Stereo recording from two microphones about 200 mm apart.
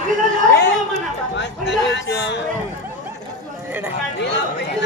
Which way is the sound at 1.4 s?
60° left (ahead or behind).